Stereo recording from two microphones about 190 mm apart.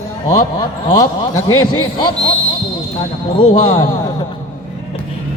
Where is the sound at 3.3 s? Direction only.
25° left (ahead or behind).